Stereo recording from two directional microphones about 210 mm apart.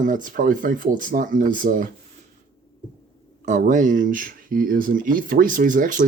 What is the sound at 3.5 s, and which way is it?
Speech, 35° right (ahead or behind).